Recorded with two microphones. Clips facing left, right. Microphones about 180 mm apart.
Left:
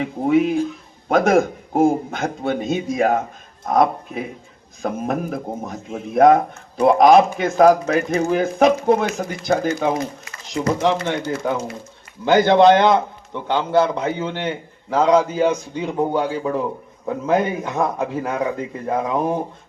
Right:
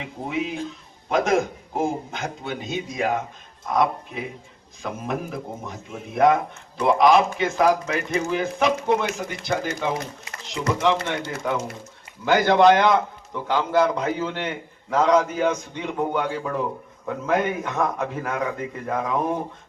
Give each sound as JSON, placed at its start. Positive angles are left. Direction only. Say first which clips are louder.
{"t": 0.0, "sound": "a man's voice", "louder": "left 11 dB", "side_deg": 50}
{"t": 12.2, "sound": "a man's voice", "louder": "left 4 dB", "side_deg": 25}